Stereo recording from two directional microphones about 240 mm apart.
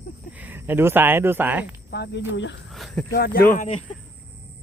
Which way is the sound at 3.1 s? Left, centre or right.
Left.